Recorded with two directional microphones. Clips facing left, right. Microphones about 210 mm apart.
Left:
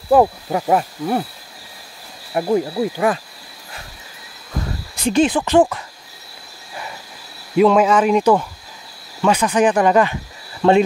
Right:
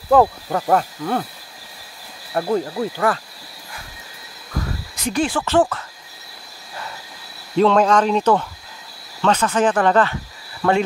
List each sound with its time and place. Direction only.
0.1 s speech: 15° left (ahead or behind)
2.3 s speech: 15° left (ahead or behind)
4.9 s speech: 25° left (ahead or behind)
7.5 s speech: 10° left (ahead or behind)
10.6 s speech: 25° left (ahead or behind)